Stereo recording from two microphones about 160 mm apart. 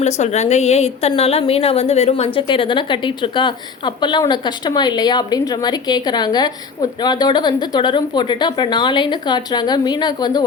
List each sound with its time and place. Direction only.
0.2 s a woman's voice: 45° left (ahead or behind); by 10.4 s 25° left (ahead or behind)